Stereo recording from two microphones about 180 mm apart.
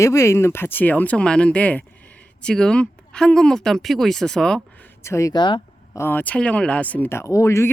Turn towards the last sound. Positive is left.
turn(degrees=15)  # may be behind; listen again after turning